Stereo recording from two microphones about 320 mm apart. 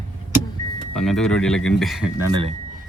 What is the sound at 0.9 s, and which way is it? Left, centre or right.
Speech, centre.